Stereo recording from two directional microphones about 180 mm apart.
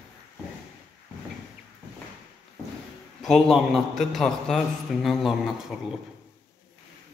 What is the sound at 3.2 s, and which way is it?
A man's voice, centre (ahead or behind).